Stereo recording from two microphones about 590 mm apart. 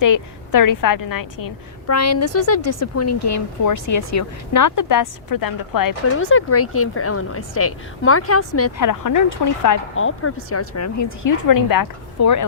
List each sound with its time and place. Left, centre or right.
0.0 s speech: left
6.1 s speech: centre